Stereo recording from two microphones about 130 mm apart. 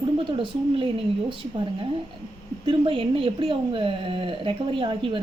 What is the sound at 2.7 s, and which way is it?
Speech, 40° right (ahead or behind).